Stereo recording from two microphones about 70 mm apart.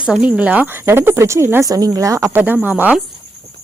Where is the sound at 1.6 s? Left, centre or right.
Right.